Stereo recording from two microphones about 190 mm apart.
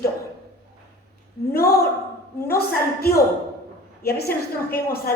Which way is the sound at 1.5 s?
55° left (ahead or behind).